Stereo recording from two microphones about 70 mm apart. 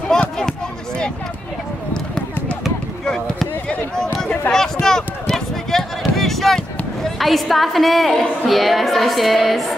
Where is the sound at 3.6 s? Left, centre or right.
Centre.